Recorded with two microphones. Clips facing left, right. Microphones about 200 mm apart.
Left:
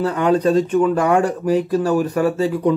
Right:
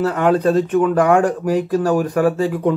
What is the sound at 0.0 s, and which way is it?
Speech, 50° right (ahead or behind).